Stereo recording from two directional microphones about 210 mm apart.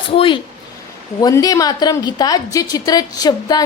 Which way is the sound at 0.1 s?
25° left (ahead or behind).